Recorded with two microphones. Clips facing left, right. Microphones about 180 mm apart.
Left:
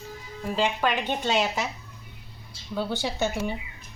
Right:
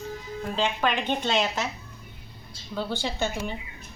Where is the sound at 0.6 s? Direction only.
10° left (ahead or behind).